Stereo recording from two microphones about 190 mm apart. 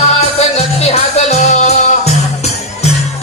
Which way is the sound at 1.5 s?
35° left (ahead or behind).